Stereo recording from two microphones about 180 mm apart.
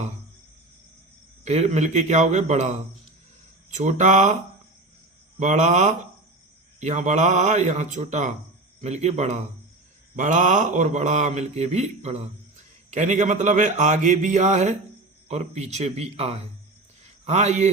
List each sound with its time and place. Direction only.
1.5 s a man's voice: 40° right (ahead or behind)
3.8 s a man's voice: 40° right (ahead or behind)
5.4 s a man's voice: 40° right (ahead or behind)